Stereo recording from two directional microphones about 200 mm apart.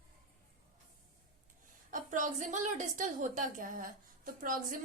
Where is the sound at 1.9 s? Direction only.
40° right (ahead or behind).